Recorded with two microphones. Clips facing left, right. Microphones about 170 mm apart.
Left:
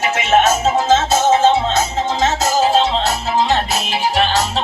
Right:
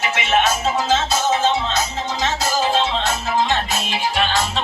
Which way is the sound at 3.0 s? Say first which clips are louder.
Left 3 dB; 40° left (ahead or behind).